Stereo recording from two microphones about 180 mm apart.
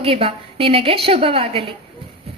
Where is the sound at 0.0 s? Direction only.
30° right (ahead or behind).